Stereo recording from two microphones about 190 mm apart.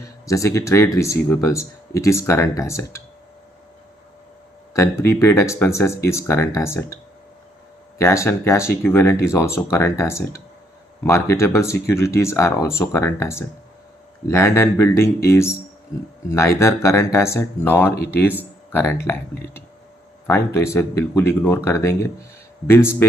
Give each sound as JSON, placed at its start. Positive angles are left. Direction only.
{"t": 0.3, "sound": "speech", "side_deg": 15}
{"t": 4.7, "sound": "speech", "side_deg": 15}
{"t": 20.2, "sound": "speech", "side_deg": 15}